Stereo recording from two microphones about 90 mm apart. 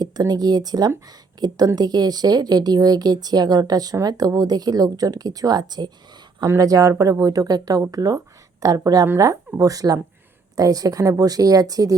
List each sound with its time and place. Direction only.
0.0 s a woman's voice: 50° right (ahead or behind)